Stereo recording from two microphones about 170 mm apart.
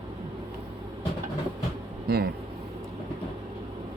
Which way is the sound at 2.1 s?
70° right (ahead or behind).